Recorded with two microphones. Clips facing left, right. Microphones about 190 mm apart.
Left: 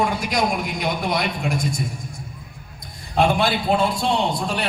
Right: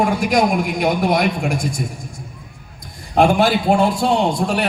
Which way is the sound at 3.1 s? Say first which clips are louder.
Right 5 dB; 55° right (ahead or behind).